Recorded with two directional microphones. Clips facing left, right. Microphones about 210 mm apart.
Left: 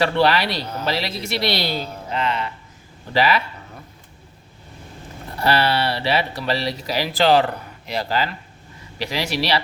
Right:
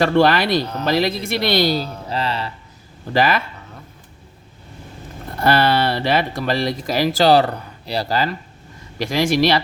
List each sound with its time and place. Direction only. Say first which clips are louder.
0.0 s speech: right 3 dB; 50° right (ahead or behind)
2.0 s speech: left 3 dB; 35° right (ahead or behind)
3.1 s speech: right 1 dB; 45° right (ahead or behind)
5.4 s speech: right 3 dB; 50° right (ahead or behind)